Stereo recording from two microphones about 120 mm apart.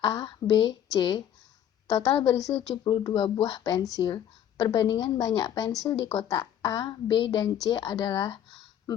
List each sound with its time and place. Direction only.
0.0 s speech: 35° left (ahead or behind)
2.1 s a woman's voice: 45° left (ahead or behind)
2.6 s speech: 35° left (ahead or behind)